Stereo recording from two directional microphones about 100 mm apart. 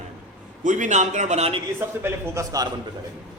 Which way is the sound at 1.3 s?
90° right.